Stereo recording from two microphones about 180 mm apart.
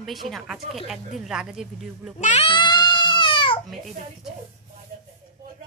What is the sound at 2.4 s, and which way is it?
Baby cry, 25° left (ahead or behind).